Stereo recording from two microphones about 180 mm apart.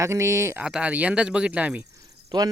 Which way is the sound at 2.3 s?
25° right (ahead or behind).